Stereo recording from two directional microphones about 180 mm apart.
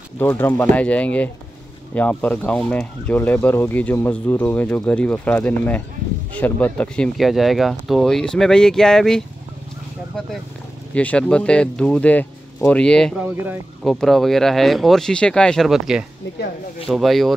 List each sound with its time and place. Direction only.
0.2 s speech: 10° left (ahead or behind)
11.0 s speech: 5° left (ahead or behind)
13.2 s speech: 10° right (ahead or behind)
13.8 s speech: centre (ahead or behind)